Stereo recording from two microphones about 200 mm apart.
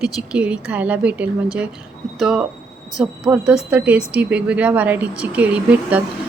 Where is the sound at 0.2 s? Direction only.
5° right (ahead or behind).